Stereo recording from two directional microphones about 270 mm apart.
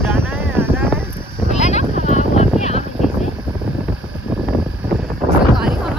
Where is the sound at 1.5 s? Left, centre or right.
Left.